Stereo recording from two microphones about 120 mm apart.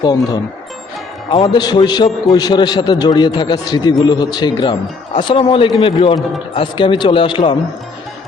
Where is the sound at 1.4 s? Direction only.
35° left (ahead or behind).